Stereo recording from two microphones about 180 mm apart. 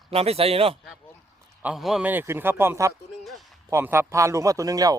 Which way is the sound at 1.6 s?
5° right (ahead or behind).